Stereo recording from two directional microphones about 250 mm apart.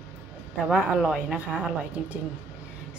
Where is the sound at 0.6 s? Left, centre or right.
Centre.